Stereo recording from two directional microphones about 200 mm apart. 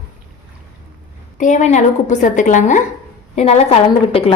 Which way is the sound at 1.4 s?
35° left (ahead or behind).